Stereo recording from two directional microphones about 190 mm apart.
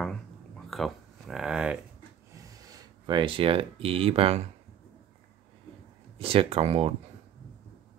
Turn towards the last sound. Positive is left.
turn(degrees=-30)  # may be behind; listen again after turning